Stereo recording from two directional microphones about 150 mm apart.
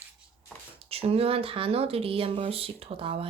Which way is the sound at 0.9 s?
40° right (ahead or behind).